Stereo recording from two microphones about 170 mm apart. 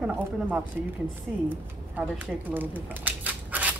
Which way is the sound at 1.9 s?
10° right (ahead or behind).